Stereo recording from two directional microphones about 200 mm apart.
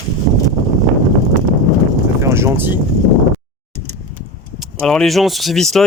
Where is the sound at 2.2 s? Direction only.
10° right (ahead or behind).